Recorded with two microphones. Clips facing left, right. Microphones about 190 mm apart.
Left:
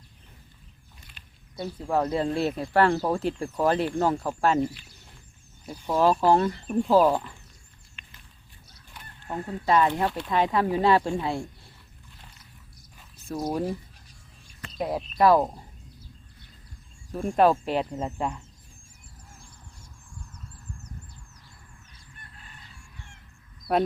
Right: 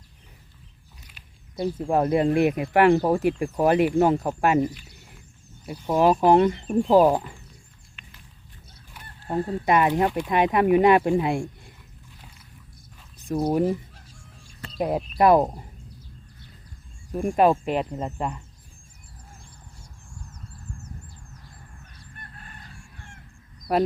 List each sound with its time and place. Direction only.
1.1 s a sound: 5° right (ahead or behind)
1.6 s speech: 15° right (ahead or behind)
5.8 s speech: 15° right (ahead or behind)
9.2 s speech: 35° right (ahead or behind)
9.6 s speech: 10° right (ahead or behind)
13.5 s speech: 15° right (ahead or behind)
14.8 s speech: 15° right (ahead or behind)
17.1 s speech: 15° right (ahead or behind)
21.9 s fowl: 55° right (ahead or behind)